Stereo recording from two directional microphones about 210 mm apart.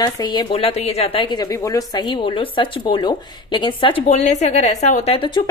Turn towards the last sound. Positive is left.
turn(degrees=25)  # may be behind; listen again after turning